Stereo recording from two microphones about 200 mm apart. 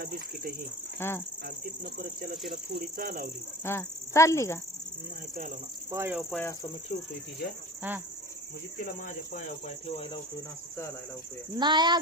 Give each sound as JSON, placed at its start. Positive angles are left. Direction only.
{"t": 0.9, "sound": "speech", "side_deg": 10}
{"t": 1.5, "sound": "speech", "side_deg": -45}
{"t": 3.6, "sound": "speech", "side_deg": 10}
{"t": 5.9, "sound": "speech", "side_deg": -15}
{"t": 6.3, "sound": "speech", "side_deg": 15}
{"t": 7.8, "sound": "speech", "side_deg": -10}
{"t": 8.8, "sound": "speech", "side_deg": 40}
{"t": 11.5, "sound": "speech", "side_deg": -20}